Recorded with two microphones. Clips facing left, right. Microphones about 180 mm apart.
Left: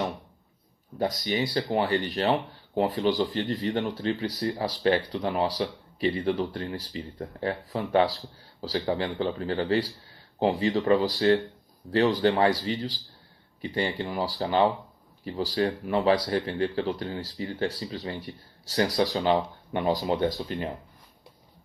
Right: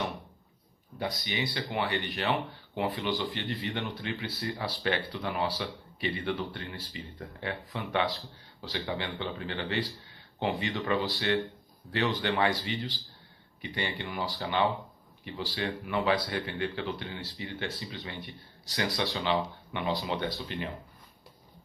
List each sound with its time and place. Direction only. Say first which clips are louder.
0.9 s speech: left 7 dB; 40° left (ahead or behind)